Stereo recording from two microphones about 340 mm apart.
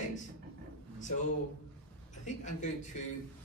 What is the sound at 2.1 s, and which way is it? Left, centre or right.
Speech, left.